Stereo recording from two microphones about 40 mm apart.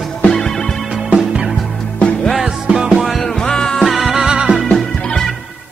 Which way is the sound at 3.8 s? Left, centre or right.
Centre.